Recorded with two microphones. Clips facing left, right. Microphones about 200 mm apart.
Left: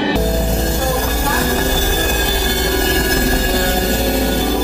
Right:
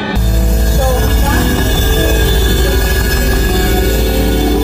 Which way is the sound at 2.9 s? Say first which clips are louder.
Left 1 dB; 30° left (ahead or behind).